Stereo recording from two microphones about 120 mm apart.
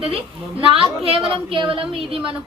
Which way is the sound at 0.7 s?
50° right (ahead or behind).